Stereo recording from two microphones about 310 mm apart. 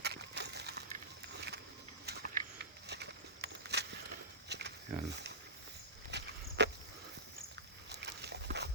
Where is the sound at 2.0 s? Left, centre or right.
Right.